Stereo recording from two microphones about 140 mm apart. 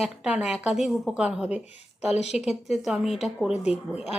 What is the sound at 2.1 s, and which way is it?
Speech, 50° left (ahead or behind).